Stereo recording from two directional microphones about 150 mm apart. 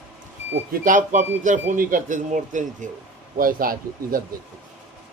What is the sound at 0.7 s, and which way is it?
Speech, 60° right (ahead or behind).